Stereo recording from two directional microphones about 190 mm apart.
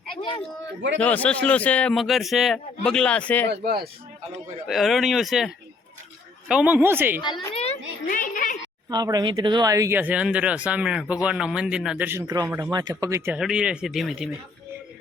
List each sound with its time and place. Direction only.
0.2 s speech: 20° left (ahead or behind)
1.0 s a man's voice: 5° left (ahead or behind)
3.5 s speech: 55° right (ahead or behind)
4.7 s speech: centre (ahead or behind)
6.5 s speech: 5° right (ahead or behind)
7.5 s a sound: 35° left (ahead or behind)
8.0 s a sound: 45° left (ahead or behind)
8.9 s speech: 20° right (ahead or behind)
12.2 s speech: 20° right (ahead or behind)
12.5 s speech: 10° right (ahead or behind)